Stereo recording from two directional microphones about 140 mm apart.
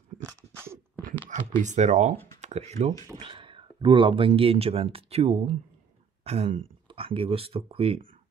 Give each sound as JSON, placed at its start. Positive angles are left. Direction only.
{"t": 0.2, "sound": "a sound", "side_deg": -20}
{"t": 1.6, "sound": "speech", "side_deg": -55}
{"t": 3.3, "sound": "speech", "side_deg": -35}